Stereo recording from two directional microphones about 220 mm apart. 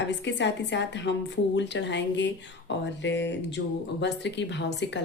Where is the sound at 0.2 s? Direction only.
55° left (ahead or behind).